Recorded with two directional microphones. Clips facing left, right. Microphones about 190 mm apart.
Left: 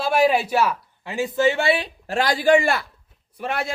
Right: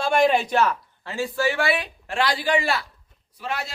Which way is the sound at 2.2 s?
45° left (ahead or behind).